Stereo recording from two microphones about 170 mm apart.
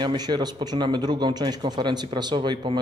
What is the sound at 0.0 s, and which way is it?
A man's voice, 25° right (ahead or behind).